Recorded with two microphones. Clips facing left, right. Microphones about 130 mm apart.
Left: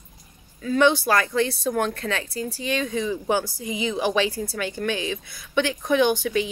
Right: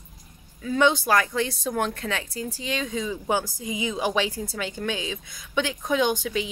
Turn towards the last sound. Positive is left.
turn(degrees=-15)  # may be behind; listen again after turning